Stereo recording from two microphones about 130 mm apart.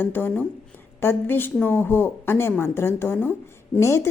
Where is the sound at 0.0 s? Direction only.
15° left (ahead or behind).